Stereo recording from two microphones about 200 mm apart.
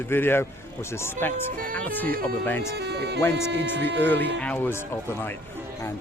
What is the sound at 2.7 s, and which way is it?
Speech, 55° right (ahead or behind).